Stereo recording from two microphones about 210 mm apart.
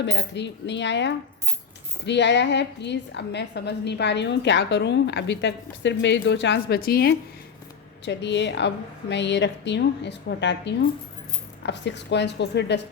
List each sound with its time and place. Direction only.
0.0 s a woman's voice: 55° left (ahead or behind)